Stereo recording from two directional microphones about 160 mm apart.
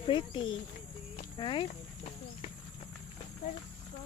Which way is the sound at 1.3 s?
30° left (ahead or behind).